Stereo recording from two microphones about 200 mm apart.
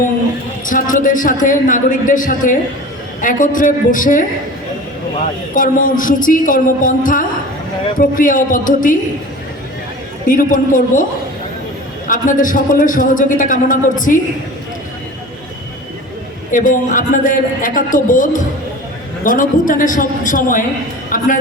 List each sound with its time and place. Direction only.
0.6 s a man's voice: 40° left (ahead or behind)
5.5 s music: 40° left (ahead or behind)
10.2 s music: 40° left (ahead or behind)
12.0 s a man's voice: 40° left (ahead or behind)
16.5 s a man's voice: 40° left (ahead or behind)
21.1 s music: 45° left (ahead or behind)